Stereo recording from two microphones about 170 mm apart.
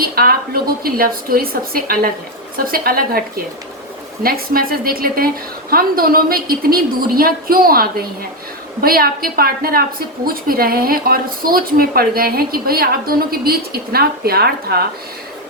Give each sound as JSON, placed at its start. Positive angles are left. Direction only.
{"t": 0.0, "sound": "a woman's voice", "side_deg": -60}